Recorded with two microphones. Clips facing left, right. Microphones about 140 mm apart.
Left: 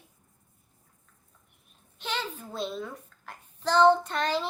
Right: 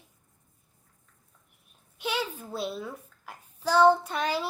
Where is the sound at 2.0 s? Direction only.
10° right (ahead or behind).